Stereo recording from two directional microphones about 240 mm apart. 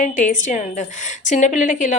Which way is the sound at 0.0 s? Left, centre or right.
Left.